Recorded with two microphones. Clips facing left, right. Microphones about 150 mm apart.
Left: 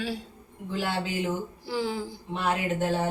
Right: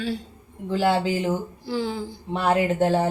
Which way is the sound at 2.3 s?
35° right (ahead or behind).